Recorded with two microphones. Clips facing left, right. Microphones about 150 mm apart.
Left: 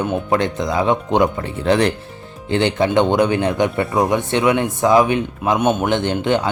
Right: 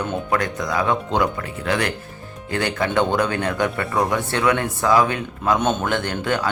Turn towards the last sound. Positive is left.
turn(degrees=20)  # may be behind; listen again after turning